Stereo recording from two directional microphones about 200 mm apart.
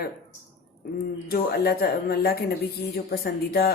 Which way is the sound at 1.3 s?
50° left (ahead or behind).